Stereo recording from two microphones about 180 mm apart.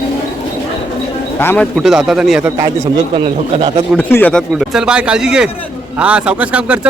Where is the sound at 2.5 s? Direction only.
20° right (ahead or behind).